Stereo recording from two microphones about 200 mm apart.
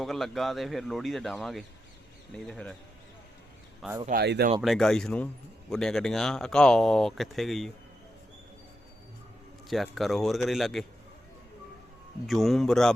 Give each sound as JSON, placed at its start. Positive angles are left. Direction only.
{"t": 0.0, "sound": "speech", "side_deg": 0}
{"t": 4.0, "sound": "speech", "side_deg": -50}
{"t": 4.6, "sound": "speech", "side_deg": 0}
{"t": 9.6, "sound": "speech", "side_deg": 0}
{"t": 12.2, "sound": "speech", "side_deg": 0}